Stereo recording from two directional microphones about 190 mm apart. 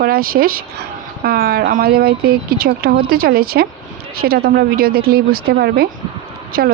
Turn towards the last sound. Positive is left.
turn(degrees=-50)  # may be behind; listen again after turning